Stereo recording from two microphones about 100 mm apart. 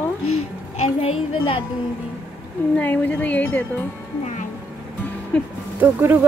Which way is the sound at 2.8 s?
15° left (ahead or behind).